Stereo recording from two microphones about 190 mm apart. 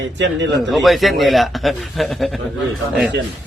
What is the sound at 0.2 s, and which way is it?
Speech, 70° right (ahead or behind).